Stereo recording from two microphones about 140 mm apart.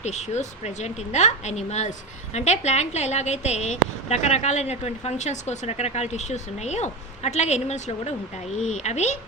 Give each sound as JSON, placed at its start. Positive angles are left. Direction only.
{"t": 0.0, "sound": "a woman's voice", "side_deg": 55}